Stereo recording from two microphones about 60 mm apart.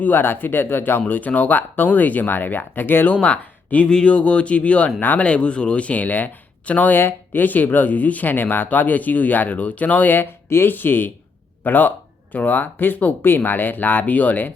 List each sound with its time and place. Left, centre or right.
0.0 s speech: left
3.2 s speech: centre